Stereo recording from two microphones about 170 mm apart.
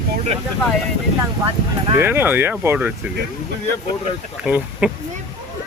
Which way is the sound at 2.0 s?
15° right (ahead or behind).